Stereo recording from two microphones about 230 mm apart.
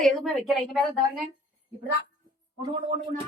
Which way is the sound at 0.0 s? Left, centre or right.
Centre.